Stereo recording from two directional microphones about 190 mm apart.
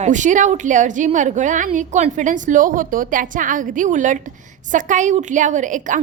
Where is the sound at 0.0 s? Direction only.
40° right (ahead or behind).